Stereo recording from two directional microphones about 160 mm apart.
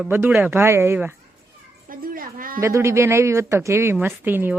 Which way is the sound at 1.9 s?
60° right (ahead or behind).